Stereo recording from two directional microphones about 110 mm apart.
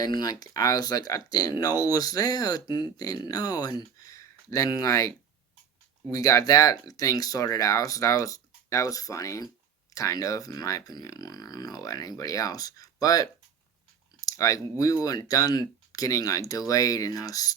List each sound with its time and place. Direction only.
0.0 s speech: 35° left (ahead or behind)
6.1 s speech: 30° left (ahead or behind)